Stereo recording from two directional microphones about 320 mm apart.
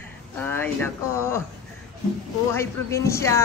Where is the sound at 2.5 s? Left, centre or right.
Centre.